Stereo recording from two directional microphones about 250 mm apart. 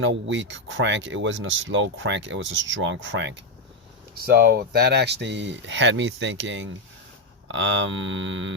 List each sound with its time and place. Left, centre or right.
0.0 s speech: right